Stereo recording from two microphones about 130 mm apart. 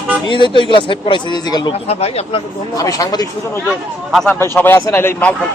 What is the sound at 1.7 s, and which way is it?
Speech, 50° left (ahead or behind).